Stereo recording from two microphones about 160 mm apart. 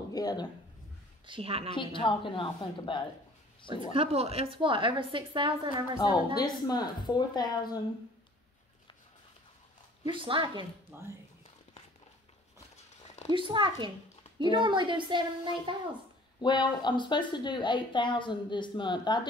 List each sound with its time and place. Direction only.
0.1 s a man's voice: 25° left (ahead or behind)
1.2 s a woman's voice: 35° right (ahead or behind)
1.8 s a woman's voice: 30° left (ahead or behind)
3.7 s a woman's voice: 35° right (ahead or behind)
5.9 s a woman's voice: 25° left (ahead or behind)
10.0 s a woman's voice: 30° right (ahead or behind)
10.9 s speech: 15° right (ahead or behind)
13.3 s a woman's voice: 30° right (ahead or behind)
16.3 s a woman's voice: 25° left (ahead or behind)